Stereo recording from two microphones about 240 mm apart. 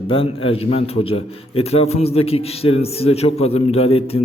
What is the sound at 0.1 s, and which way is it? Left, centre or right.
A man's voice, left.